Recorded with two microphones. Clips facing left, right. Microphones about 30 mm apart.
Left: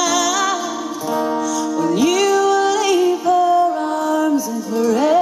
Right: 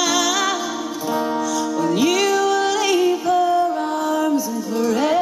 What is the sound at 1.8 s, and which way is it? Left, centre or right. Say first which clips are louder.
Music: left 2 dB; centre.